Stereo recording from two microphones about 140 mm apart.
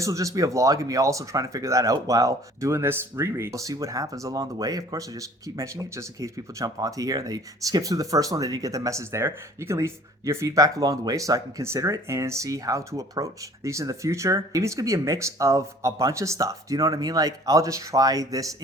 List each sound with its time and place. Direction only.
0.0 s speech: 25° right (ahead or behind)